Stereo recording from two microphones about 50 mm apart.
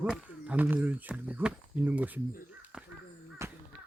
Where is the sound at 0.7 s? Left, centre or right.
Right.